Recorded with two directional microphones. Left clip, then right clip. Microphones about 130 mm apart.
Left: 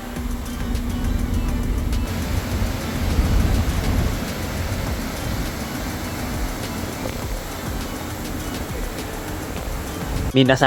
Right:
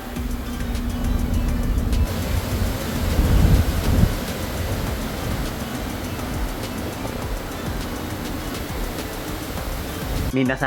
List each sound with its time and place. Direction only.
10.3 s speech: 40° left (ahead or behind)